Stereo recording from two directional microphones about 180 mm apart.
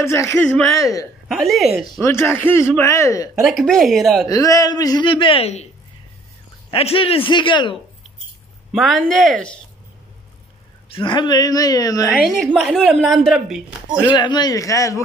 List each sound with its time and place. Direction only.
0.0 s speech: 15° left (ahead or behind)
0.7 s a woman's voice: 20° left (ahead or behind)
1.3 s speech: centre (ahead or behind)
2.0 s speech: 15° left (ahead or behind)
3.3 s speech: centre (ahead or behind)
4.3 s a woman's voice: 20° left (ahead or behind); by 5.7 s 35° left (ahead or behind)
6.7 s a woman's voice: 30° left (ahead or behind)
8.7 s speech: centre (ahead or behind)
10.9 s a woman's voice: 25° left (ahead or behind)
12.1 s speech: centre (ahead or behind)
14.1 s a woman's voice: 25° left (ahead or behind)